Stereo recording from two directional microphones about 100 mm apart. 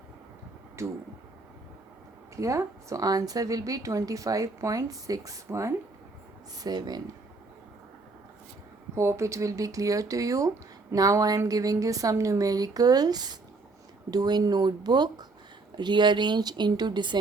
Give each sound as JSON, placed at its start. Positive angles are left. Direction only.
{"t": 0.8, "sound": "speech", "side_deg": -30}
{"t": 2.3, "sound": "a woman's voice", "side_deg": -30}
{"t": 6.6, "sound": "speech", "side_deg": -40}
{"t": 9.0, "sound": "a woman's voice", "side_deg": -30}